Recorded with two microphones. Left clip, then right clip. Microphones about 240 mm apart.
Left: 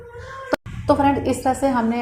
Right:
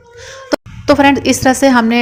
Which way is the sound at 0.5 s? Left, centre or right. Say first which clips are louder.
Right 7 dB; right.